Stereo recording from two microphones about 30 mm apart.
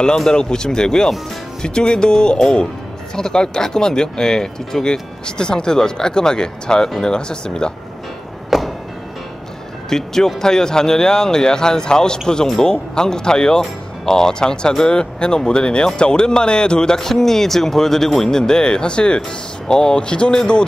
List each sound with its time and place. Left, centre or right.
0.3 s speech: left
5.2 s speech: left
8.5 s a sound: centre
9.8 s speech: centre
17.0 s speech: centre; by 20.6 s left